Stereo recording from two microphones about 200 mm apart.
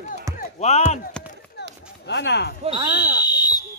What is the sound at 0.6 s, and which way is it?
Speech, 35° left (ahead or behind).